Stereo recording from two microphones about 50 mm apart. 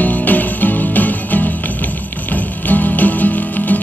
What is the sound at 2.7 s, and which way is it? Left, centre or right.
Music, left.